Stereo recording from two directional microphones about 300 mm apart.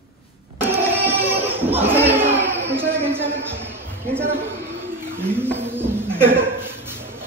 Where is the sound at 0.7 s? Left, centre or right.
Centre.